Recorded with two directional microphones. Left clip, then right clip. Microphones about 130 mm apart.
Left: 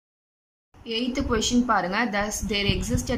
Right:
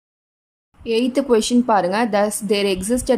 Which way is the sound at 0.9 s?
40° right (ahead or behind).